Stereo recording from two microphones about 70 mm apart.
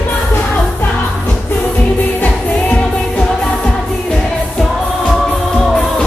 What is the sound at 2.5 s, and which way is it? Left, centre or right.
Music of asia, left.